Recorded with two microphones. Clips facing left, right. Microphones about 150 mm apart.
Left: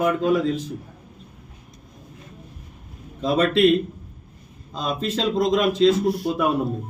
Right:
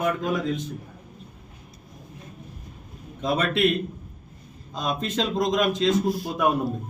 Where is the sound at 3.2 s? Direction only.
5° left (ahead or behind).